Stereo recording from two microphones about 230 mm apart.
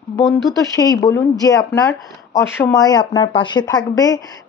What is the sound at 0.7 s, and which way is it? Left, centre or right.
Speech, centre.